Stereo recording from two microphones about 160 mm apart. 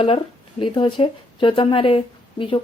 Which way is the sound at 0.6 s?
30° left (ahead or behind).